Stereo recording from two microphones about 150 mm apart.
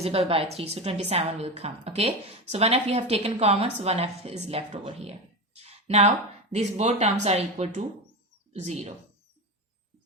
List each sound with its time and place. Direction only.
0.0 s a woman's voice: 40° right (ahead or behind)
5.5 s a sound: 45° right (ahead or behind)
6.5 s a woman's voice: 45° right (ahead or behind)